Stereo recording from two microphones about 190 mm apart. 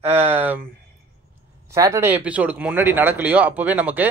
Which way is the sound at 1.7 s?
15° right (ahead or behind).